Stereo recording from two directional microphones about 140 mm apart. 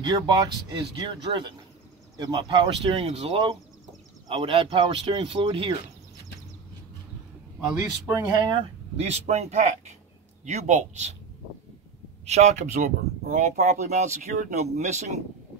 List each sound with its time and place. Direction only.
0.0 s speech: 30° right (ahead or behind)
8.1 s speech: 30° right (ahead or behind)
8.9 s speech: 50° right (ahead or behind)
12.3 s speech: 50° right (ahead or behind)